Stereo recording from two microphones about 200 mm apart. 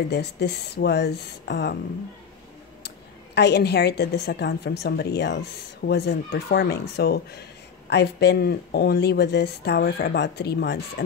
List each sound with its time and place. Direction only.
0.1 s a woman's voice: 55° left (ahead or behind)
3.3 s a woman's voice: 55° left (ahead or behind)